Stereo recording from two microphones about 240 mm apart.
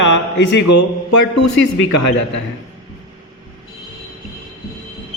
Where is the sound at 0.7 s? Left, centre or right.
Left.